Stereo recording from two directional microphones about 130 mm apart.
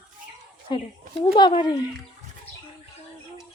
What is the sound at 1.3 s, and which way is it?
Speech, 40° left (ahead or behind).